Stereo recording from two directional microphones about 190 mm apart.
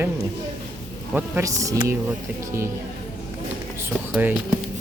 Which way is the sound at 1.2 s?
15° right (ahead or behind).